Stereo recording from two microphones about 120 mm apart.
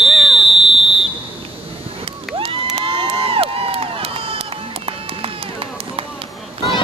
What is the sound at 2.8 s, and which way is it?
Crowd, 50° right (ahead or behind).